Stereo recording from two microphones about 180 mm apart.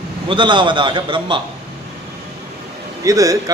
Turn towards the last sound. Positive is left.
turn(degrees=-20)  # may be behind; listen again after turning